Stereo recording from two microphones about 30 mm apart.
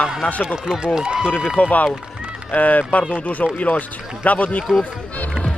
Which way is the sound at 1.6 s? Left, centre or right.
Left.